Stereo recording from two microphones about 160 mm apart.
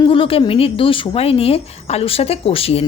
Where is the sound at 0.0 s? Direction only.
35° left (ahead or behind).